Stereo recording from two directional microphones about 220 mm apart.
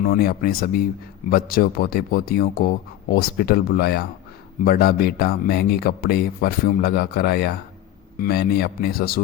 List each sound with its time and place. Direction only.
0.0 s speech: 40° left (ahead or behind)